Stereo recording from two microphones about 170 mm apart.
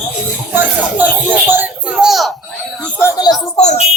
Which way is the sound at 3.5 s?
40° left (ahead or behind).